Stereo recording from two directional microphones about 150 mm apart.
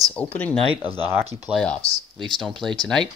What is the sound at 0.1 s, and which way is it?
Speech, 10° left (ahead or behind).